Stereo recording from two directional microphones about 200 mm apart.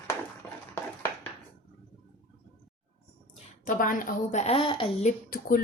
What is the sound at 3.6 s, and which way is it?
Speech, 45° left (ahead or behind).